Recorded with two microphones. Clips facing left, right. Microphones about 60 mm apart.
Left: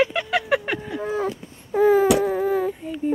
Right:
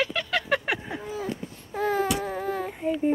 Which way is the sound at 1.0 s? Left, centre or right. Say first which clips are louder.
Left 11 dB; left.